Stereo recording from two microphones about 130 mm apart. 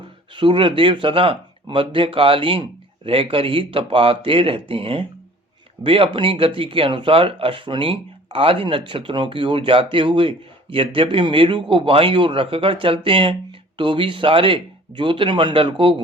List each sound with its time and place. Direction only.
0.3 s speech: 40° right (ahead or behind)